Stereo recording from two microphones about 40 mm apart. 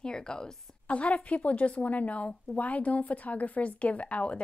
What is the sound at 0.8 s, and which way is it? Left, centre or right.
A woman's voice, left.